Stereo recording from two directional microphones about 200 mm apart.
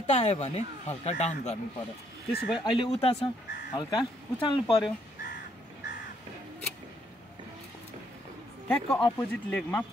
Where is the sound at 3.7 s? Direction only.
20° left (ahead or behind).